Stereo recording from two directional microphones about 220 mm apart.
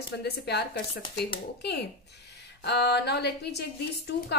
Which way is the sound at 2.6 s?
50° left (ahead or behind).